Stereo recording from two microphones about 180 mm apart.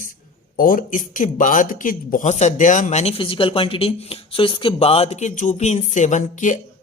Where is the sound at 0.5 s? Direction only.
50° left (ahead or behind).